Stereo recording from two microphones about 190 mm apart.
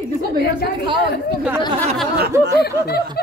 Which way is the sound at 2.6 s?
55° left (ahead or behind).